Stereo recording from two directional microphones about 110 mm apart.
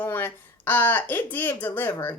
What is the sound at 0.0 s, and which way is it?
A woman's voice, 20° left (ahead or behind).